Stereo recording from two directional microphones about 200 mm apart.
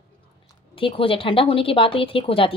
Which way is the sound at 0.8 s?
25° left (ahead or behind).